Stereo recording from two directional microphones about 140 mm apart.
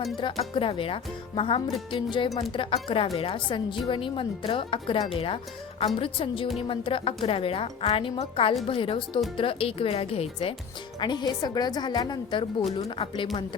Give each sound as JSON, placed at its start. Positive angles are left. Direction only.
{"t": 0.2, "sound": "a woman's voice", "side_deg": 35}
{"t": 11.0, "sound": "a woman's voice", "side_deg": 35}